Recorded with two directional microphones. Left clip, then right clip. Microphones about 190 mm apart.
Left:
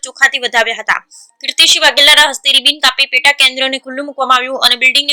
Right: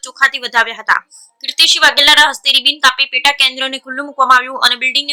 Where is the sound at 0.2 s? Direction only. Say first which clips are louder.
Left 1 dB; 15° left (ahead or behind).